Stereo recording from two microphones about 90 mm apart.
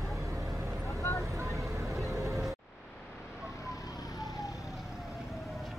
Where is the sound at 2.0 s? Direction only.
35° right (ahead or behind).